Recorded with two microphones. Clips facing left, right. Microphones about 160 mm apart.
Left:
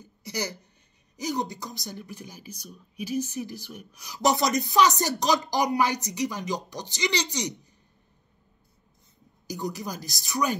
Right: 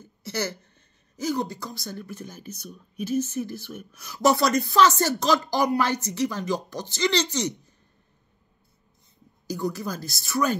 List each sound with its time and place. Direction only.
0.0 s a sound: 15° left (ahead or behind)
1.1 s speech: 15° left (ahead or behind)
9.5 s speech: 15° left (ahead or behind)